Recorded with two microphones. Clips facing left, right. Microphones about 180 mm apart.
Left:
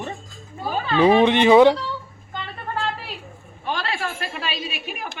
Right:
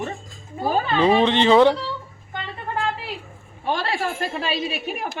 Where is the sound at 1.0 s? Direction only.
15° left (ahead or behind).